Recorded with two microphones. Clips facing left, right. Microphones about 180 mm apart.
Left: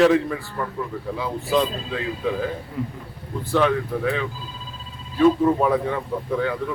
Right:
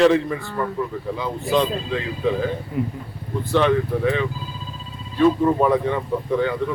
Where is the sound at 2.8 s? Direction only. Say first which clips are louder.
Right 5 dB; 15° right (ahead or behind).